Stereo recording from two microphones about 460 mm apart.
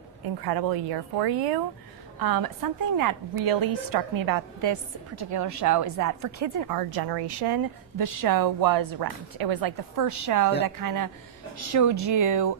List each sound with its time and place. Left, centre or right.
0.4 s a woman's voice: right